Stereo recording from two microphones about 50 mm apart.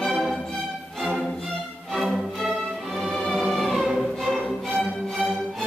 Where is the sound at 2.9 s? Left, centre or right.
Centre.